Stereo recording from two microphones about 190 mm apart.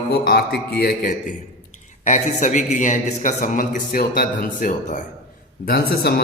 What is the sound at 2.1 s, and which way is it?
A man's voice, 40° left (ahead or behind).